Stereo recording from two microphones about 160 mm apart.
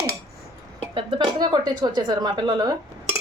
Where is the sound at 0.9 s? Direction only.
30° right (ahead or behind).